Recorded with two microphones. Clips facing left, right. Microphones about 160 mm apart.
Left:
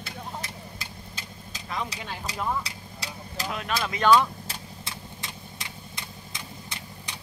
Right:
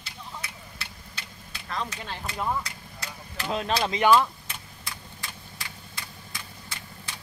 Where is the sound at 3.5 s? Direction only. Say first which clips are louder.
Right 4 dB; 30° right (ahead or behind).